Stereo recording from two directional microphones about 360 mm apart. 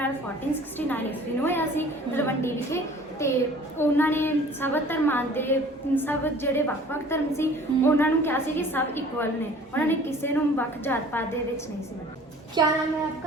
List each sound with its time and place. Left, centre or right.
0.8 s a woman's voice: centre
12.6 s a woman's voice: centre